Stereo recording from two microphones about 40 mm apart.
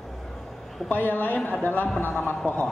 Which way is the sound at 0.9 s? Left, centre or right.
Left.